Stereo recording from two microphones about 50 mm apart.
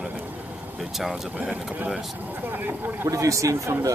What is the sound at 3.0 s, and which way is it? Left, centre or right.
Speech, right.